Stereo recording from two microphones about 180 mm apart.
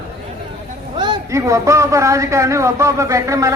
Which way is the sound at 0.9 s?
25° right (ahead or behind).